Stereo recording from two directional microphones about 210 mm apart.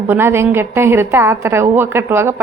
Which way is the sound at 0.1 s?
10° right (ahead or behind).